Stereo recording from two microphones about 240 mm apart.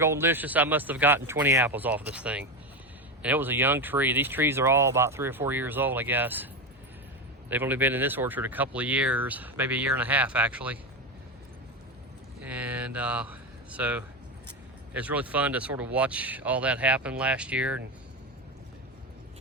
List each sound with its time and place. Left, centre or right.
0.0 s speech: centre
7.5 s speech: centre
12.4 s a sound: centre
13.7 s speech: centre